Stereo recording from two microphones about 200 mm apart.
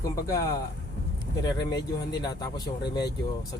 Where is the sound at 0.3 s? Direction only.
15° left (ahead or behind).